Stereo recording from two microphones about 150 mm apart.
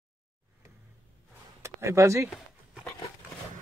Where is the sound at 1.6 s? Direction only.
20° right (ahead or behind).